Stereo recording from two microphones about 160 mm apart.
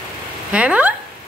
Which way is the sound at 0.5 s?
10° right (ahead or behind).